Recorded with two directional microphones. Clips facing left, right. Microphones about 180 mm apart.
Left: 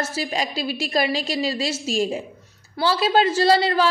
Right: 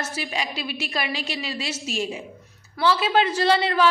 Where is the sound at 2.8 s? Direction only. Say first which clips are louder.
Left 2 dB; 35° left (ahead or behind).